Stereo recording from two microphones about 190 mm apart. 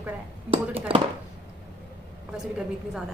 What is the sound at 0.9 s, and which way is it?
Speech, 30° right (ahead or behind).